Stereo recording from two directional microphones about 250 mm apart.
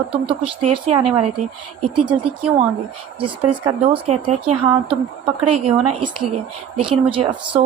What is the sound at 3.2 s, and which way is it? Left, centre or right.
Speech, right.